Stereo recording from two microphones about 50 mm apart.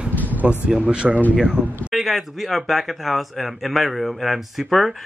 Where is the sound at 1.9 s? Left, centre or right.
Centre.